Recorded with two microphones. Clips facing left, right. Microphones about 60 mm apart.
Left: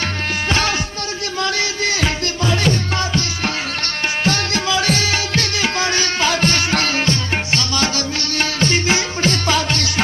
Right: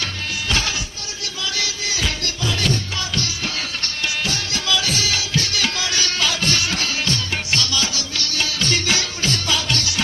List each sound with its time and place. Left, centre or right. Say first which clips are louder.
1.6 s music: left 6 dB; left